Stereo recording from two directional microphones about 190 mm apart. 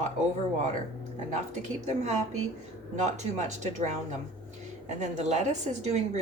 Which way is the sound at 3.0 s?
40° right (ahead or behind).